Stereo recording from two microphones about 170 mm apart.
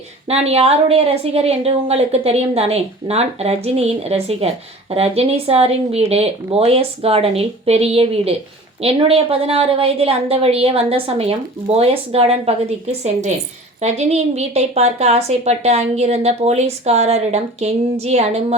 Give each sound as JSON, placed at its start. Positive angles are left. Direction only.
{"t": 0.3, "sound": "a woman's voice", "side_deg": -35}
{"t": 13.8, "sound": "a woman's voice", "side_deg": -40}